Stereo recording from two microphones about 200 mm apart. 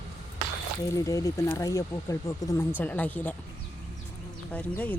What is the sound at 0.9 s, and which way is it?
Speech, 15° left (ahead or behind).